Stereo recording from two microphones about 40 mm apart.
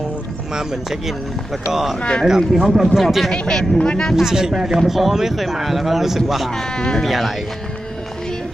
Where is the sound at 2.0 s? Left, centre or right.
Left.